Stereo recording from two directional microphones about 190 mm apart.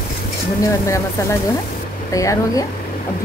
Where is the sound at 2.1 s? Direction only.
15° left (ahead or behind).